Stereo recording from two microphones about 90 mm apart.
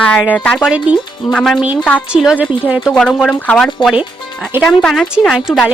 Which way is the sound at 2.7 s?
10° right (ahead or behind).